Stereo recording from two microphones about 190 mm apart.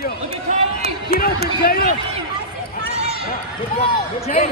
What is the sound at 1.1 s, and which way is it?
Speech, 55° left (ahead or behind).